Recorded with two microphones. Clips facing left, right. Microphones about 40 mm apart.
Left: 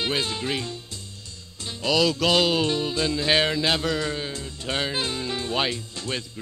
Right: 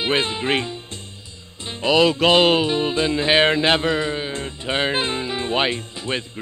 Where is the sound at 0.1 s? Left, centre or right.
Right.